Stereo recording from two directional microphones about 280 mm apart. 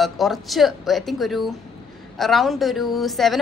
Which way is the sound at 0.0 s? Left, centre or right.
Centre.